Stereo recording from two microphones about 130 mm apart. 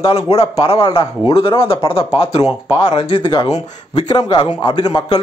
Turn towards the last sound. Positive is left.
turn(degrees=35)  # may be behind; listen again after turning